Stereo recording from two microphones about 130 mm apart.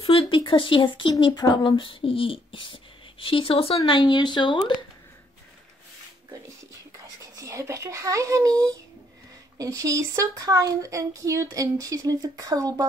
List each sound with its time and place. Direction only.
0.0 s a sound: 50° left (ahead or behind)
0.4 s speech: 40° left (ahead or behind)
3.8 s speech: 35° left (ahead or behind)
7.2 s speech: 25° right (ahead or behind)